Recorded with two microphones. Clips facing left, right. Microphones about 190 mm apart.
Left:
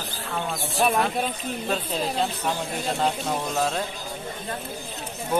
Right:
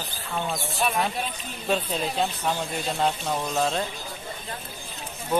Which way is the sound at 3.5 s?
5° left (ahead or behind).